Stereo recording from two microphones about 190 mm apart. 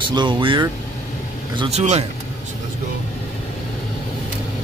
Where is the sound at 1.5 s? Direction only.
35° right (ahead or behind).